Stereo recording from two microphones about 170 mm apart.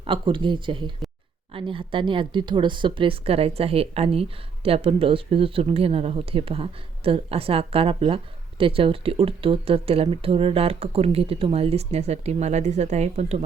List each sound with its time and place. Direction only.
0.0 s speech: 30° right (ahead or behind)